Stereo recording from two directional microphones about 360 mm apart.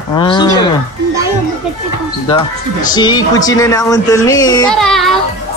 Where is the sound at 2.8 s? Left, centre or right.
Centre.